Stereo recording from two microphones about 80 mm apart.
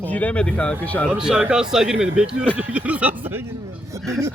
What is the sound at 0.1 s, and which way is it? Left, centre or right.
Speech, centre.